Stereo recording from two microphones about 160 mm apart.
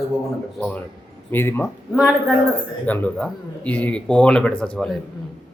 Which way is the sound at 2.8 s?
10° left (ahead or behind).